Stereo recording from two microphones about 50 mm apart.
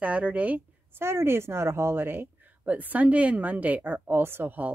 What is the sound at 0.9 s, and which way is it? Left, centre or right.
A woman's voice, right.